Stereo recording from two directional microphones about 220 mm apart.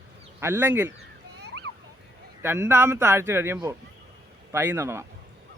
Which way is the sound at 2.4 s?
10° right (ahead or behind).